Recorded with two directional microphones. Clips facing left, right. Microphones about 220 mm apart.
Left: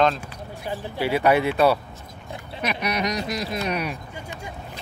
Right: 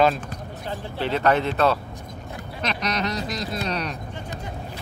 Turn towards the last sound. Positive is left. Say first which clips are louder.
# left 1 dB
turn(degrees=10)  # may be behind; listen again after turning